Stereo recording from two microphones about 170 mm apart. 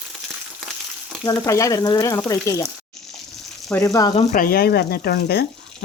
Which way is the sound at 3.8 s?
20° left (ahead or behind).